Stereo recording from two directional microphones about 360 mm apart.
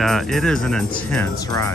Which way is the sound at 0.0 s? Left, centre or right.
Centre.